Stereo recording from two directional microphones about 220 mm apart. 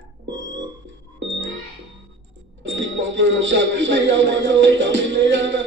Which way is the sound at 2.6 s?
55° right (ahead or behind).